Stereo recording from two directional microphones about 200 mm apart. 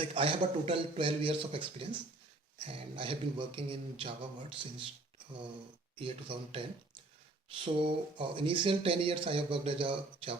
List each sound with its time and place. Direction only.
0.0 s speech: 25° right (ahead or behind)
6.0 s speech: 25° right (ahead or behind)